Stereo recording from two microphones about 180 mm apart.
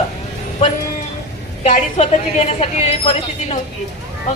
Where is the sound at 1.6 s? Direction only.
40° left (ahead or behind).